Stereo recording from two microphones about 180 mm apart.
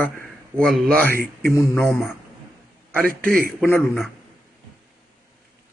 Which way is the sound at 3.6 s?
15° left (ahead or behind).